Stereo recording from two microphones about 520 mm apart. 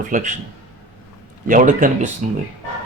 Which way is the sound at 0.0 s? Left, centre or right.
Centre.